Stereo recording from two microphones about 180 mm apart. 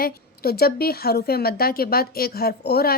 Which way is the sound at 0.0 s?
60° left (ahead or behind).